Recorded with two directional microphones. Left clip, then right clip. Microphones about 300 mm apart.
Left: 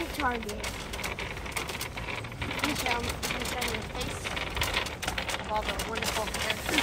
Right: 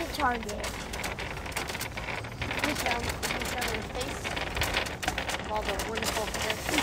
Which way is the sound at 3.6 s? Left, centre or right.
Right.